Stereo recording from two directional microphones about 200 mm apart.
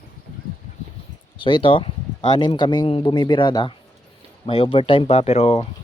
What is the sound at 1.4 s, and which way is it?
Speech, 25° left (ahead or behind).